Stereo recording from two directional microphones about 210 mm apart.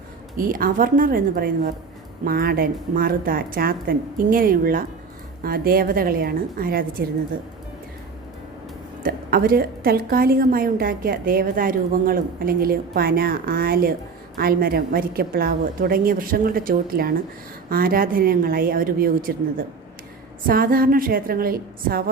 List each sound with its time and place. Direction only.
0.3 s a woman's voice: 40° right (ahead or behind)
9.0 s a woman's voice: 45° right (ahead or behind)